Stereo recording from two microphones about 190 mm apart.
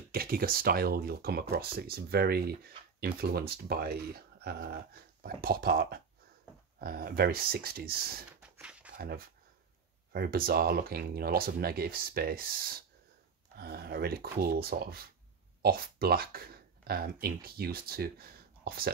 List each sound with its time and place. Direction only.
0.1 s speech: 50° right (ahead or behind)
8.4 s dog: 5° right (ahead or behind)
8.9 s speech: 50° right (ahead or behind)